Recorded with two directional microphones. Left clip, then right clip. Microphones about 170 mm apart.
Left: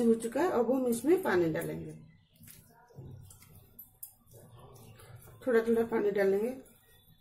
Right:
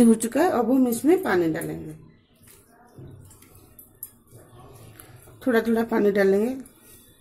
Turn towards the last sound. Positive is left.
turn(degrees=-45)  # may be behind; listen again after turning